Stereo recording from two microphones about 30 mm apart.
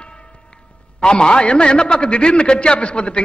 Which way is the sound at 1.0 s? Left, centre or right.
Left.